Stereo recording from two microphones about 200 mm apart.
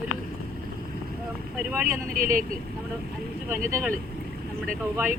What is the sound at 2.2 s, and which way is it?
Speech, 45° right (ahead or behind).